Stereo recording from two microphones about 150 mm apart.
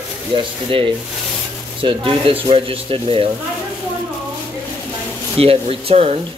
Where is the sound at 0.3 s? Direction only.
35° right (ahead or behind).